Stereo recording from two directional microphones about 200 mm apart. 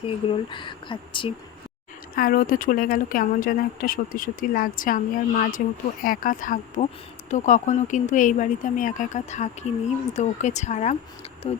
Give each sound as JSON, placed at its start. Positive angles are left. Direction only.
{"t": 0.5, "sound": "speech", "side_deg": 25}
{"t": 2.1, "sound": "speech", "side_deg": 45}